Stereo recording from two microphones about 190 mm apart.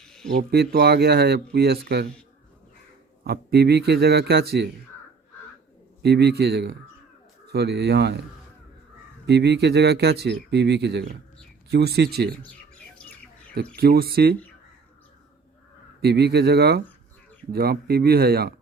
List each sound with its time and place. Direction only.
0.0 s a sound: 5° left (ahead or behind)
0.3 s speech: 55° right (ahead or behind)
3.2 s speech: 55° right (ahead or behind)
6.0 s speech: 60° right (ahead or behind)
9.2 s speech: 65° right (ahead or behind)
13.7 s speech: 55° right (ahead or behind)
16.0 s speech: 60° right (ahead or behind)